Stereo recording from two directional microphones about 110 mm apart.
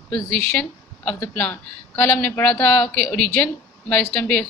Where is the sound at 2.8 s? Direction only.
5° left (ahead or behind).